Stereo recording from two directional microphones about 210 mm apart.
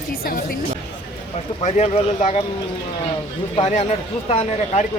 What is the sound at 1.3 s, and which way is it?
Speech, 35° left (ahead or behind).